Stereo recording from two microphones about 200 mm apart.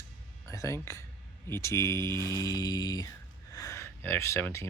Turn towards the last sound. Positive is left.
turn(degrees=10)  # may be behind; listen again after turning